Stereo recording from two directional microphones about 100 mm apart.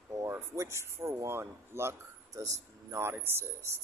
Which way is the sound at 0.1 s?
30° right (ahead or behind).